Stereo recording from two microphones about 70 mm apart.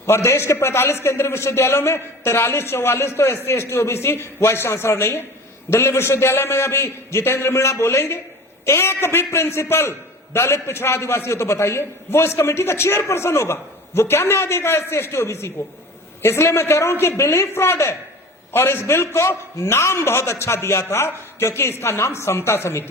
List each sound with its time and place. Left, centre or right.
0.0 s a man's voice: left